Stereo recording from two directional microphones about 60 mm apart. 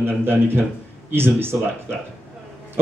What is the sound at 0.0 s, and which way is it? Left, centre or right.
A man's voice, right.